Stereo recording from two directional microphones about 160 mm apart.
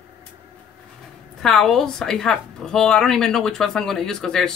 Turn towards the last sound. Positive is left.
turn(degrees=5)  # may be behind; listen again after turning